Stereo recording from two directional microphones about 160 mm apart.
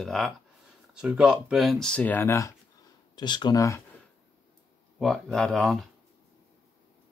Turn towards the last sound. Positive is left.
turn(degrees=0)  # may be behind; listen again after turning